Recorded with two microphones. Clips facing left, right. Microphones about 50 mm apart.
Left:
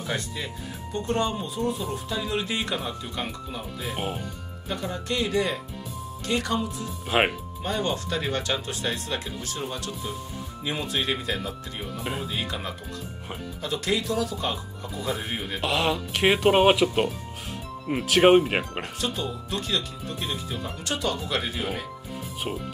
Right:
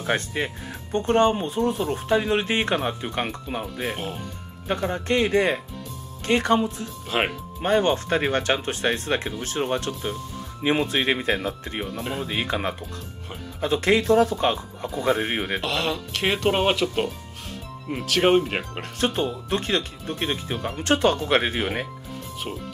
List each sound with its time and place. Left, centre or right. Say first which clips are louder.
0.0 s speech: right 6 dB; right
7.1 s speech: left 2 dB; centre
7.6 s speech: right 7 dB; right
12.0 s speech: even; centre
12.3 s speech: right 5 dB; right
15.6 s speech: left 1 dB; centre
18.9 s speech: right 8 dB; right